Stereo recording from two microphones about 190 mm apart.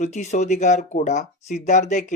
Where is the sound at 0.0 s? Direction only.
35° left (ahead or behind).